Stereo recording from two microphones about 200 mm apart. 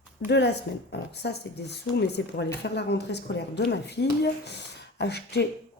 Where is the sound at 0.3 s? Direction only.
60° left (ahead or behind).